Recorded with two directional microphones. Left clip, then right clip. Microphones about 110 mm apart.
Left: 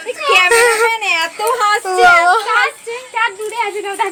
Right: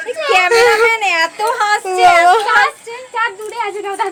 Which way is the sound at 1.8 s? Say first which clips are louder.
Right 1 dB; 30° right (ahead or behind).